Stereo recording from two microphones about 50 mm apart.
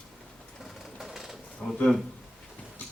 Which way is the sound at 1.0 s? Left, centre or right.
Centre.